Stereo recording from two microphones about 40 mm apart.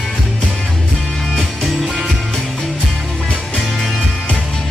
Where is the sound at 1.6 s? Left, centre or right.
Centre.